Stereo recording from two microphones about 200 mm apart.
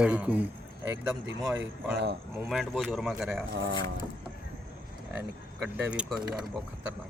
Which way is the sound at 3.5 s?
55° right (ahead or behind).